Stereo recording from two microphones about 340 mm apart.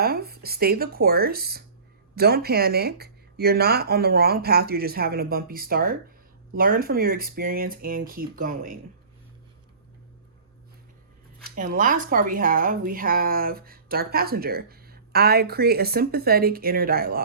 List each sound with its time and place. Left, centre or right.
0.0 s speech: right
11.4 s speech: right